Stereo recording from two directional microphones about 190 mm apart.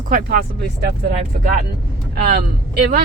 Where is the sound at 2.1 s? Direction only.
55° right (ahead or behind).